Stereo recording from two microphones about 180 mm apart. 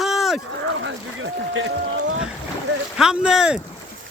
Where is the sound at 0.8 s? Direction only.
90° right.